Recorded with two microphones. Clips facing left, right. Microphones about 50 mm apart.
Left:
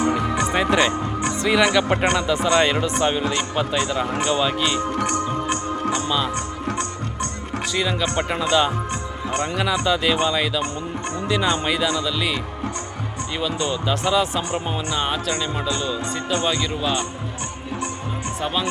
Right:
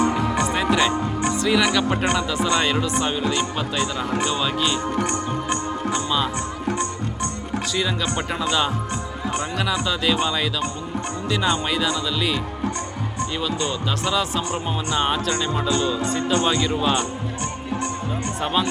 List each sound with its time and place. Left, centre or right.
0.0 s music: centre
0.5 s music: centre
1.5 s speech: centre
2.0 s speech: centre
5.5 s music: centre
7.7 s speech: centre
13.4 s speech: centre
14.8 s speech: centre